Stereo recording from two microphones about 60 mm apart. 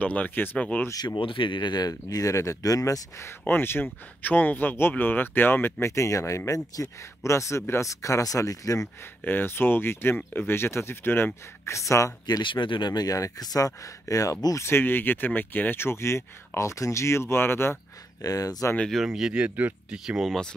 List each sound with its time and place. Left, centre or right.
0.0 s speech: left
0.6 s speech: left
1.8 s speech: left
3.4 s speech: left
7.9 s speech: left
9.2 s speech: left
11.7 s speech: left
12.9 s speech: left
14.6 s speech: left
18.2 s speech: left
18.9 s speech: centre
19.3 s speech: right
20.1 s speech: centre